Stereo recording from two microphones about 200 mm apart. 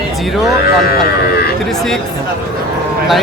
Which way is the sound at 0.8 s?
50° left (ahead or behind).